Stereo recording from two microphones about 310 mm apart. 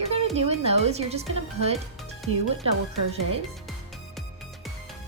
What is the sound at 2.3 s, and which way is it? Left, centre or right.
Speech, right.